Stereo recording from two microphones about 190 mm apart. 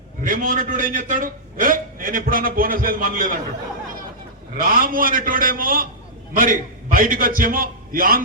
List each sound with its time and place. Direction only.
0.3 s a man's voice: 45° right (ahead or behind)
4.5 s a man's voice: 45° right (ahead or behind)